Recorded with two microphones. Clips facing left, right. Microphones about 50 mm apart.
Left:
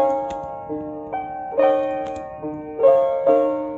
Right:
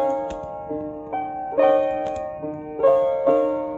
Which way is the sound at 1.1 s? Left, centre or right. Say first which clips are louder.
Right 1 dB; centre.